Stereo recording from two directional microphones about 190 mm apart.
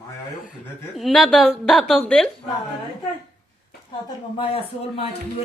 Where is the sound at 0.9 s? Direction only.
Centre (ahead or behind).